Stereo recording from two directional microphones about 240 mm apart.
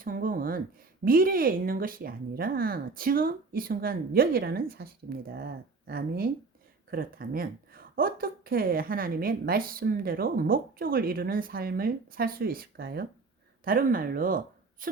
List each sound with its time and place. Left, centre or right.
0.0 s a woman's voice: right